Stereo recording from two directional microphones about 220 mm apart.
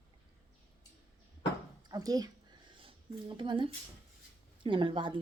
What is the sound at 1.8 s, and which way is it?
Speech, 15° right (ahead or behind).